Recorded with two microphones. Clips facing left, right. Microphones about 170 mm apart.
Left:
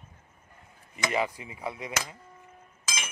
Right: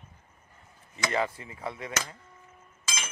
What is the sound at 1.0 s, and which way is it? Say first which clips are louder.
Speech: even; 15° left (ahead or behind).